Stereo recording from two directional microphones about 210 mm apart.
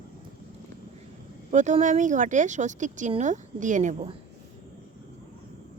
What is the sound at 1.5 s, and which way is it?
Speech, 35° right (ahead or behind).